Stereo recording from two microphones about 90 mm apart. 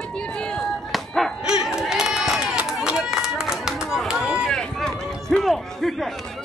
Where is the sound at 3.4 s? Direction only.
5° right (ahead or behind).